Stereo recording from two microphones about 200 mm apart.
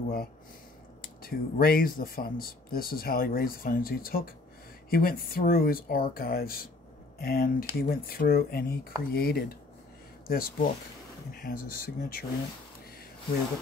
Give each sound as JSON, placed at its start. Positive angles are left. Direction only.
{"t": 1.0, "sound": "speech", "side_deg": 45}